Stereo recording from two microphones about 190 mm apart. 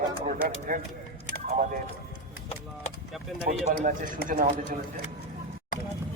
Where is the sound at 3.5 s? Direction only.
45° right (ahead or behind).